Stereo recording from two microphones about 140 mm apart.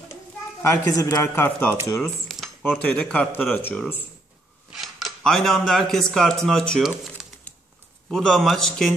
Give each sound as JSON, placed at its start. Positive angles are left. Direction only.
{"t": 0.6, "sound": "a woman's voice", "side_deg": 20}
{"t": 1.3, "sound": "speech", "side_deg": 15}
{"t": 2.0, "sound": "a sound", "side_deg": 0}
{"t": 2.8, "sound": "speech", "side_deg": 10}
{"t": 7.5, "sound": "a sound", "side_deg": 10}
{"t": 8.1, "sound": "a man's voice", "side_deg": 0}